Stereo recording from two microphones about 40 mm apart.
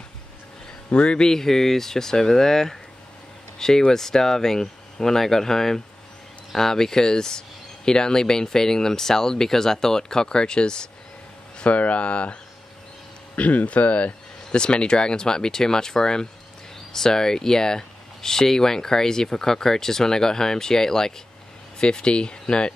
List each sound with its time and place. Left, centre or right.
0.8 s speech: left
1.2 s speech: centre
11.6 s speech: left
13.4 s speech: left
14.5 s speech: left